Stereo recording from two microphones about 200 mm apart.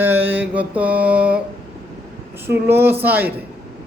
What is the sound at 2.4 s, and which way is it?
Speech, 10° right (ahead or behind).